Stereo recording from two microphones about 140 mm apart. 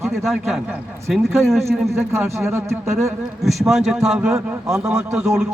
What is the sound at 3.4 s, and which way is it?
A man's voice, 5° right (ahead or behind).